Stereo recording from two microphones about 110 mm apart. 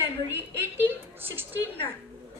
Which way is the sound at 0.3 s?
20° right (ahead or behind).